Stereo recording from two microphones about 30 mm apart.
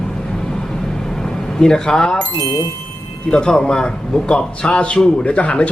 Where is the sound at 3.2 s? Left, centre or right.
Left.